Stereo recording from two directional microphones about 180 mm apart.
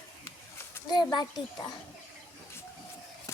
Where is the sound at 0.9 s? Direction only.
25° left (ahead or behind).